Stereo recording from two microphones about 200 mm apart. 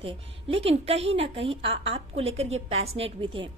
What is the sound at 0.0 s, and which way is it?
A woman's voice, 30° right (ahead or behind).